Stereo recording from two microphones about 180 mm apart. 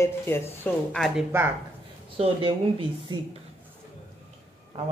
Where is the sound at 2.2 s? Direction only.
30° right (ahead or behind).